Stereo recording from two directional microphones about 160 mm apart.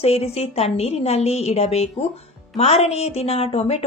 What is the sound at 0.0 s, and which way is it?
A woman's voice, 40° left (ahead or behind).